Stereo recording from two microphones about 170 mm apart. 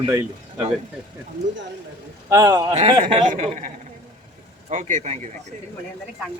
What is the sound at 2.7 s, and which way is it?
Speech, 35° right (ahead or behind).